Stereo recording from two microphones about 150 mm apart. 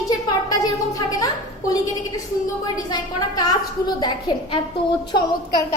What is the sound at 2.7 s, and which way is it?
A woman's voice, 25° left (ahead or behind).